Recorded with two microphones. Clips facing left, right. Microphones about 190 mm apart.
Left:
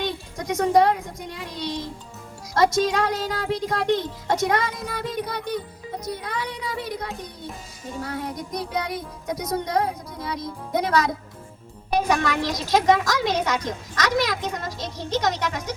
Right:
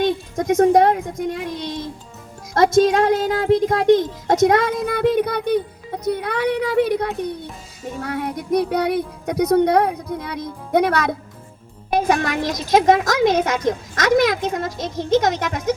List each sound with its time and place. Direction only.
0.0 s a child's voice: 50° right (ahead or behind)
11.9 s a woman's voice: 50° right (ahead or behind)